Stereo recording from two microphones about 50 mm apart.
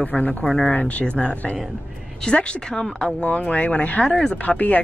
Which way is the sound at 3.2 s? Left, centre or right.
Left.